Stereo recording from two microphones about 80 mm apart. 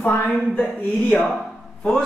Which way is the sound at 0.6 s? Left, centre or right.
Centre.